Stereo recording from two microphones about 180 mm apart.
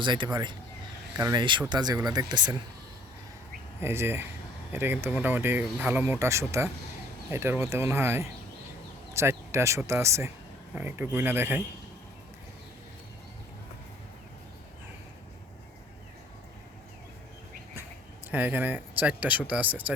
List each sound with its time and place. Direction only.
0.0 s speech: 25° right (ahead or behind)
3.8 s speech: 15° right (ahead or behind)
18.3 s speech: 10° right (ahead or behind)